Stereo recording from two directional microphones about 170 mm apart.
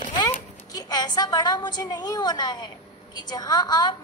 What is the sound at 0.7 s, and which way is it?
A woman's voice, 20° left (ahead or behind).